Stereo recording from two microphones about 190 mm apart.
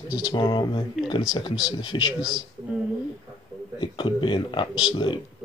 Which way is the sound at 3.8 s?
25° left (ahead or behind).